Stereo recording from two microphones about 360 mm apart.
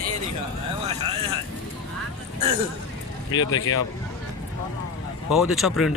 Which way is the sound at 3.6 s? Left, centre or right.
Left.